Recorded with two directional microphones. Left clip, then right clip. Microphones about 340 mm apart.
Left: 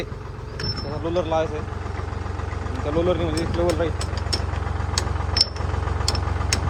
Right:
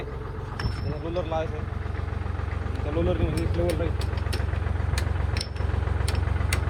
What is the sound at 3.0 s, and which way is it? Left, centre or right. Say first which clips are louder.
Speech: left 5 dB; left.